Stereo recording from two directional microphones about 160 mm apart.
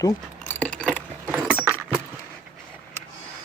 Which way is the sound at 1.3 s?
10° right (ahead or behind).